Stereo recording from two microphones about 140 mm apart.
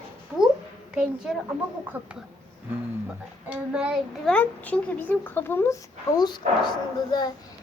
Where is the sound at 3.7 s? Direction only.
5° right (ahead or behind).